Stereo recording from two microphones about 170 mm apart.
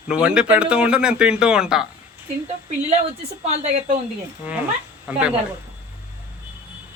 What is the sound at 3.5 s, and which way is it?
Speech, 40° right (ahead or behind).